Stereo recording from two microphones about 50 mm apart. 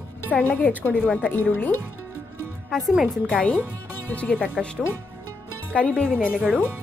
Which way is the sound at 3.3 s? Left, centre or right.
Centre.